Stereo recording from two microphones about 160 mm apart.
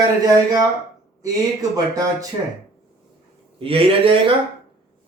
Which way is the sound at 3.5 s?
35° right (ahead or behind).